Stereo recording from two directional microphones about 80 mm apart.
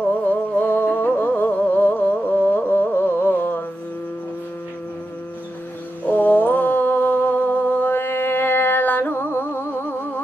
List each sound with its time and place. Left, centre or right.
0.3 s music: left
6.0 s mantra: left